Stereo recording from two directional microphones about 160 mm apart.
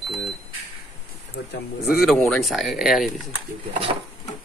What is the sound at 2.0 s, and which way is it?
Speech, centre (ahead or behind).